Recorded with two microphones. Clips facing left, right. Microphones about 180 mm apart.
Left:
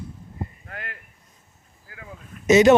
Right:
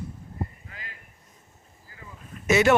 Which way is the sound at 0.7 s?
65° left (ahead or behind).